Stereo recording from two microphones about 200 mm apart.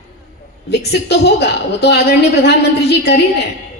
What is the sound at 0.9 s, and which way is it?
A woman's voice, 55° left (ahead or behind).